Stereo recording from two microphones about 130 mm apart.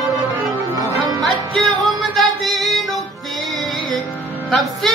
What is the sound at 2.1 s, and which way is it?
Yodeling, centre (ahead or behind).